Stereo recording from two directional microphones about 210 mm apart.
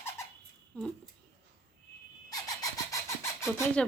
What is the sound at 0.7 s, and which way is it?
Speech, 5° left (ahead or behind).